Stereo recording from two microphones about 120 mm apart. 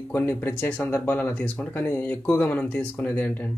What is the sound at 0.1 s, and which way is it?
A man's voice, 15° left (ahead or behind).